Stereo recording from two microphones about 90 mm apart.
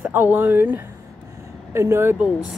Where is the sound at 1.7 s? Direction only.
30° right (ahead or behind).